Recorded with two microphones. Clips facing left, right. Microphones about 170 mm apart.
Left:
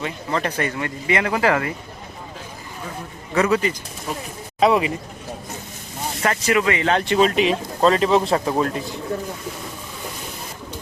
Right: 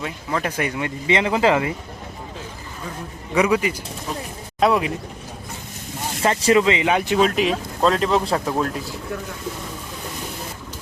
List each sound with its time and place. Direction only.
0.0 s speech: 5° right (ahead or behind)
3.3 s speech: 10° right (ahead or behind)
4.6 s speech: centre (ahead or behind)
6.2 s speech: 25° right (ahead or behind); by 9.0 s centre (ahead or behind)